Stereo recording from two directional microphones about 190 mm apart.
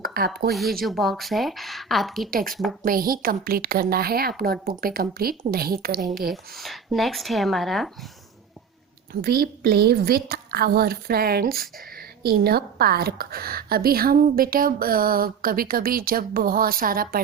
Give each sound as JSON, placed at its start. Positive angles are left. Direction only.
{"t": 0.0, "sound": "a sound", "side_deg": -50}
{"t": 0.9, "sound": "speech", "side_deg": 0}
{"t": 2.3, "sound": "a woman's voice", "side_deg": -50}
{"t": 6.3, "sound": "speech", "side_deg": 0}
{"t": 9.2, "sound": "a woman's voice", "side_deg": -55}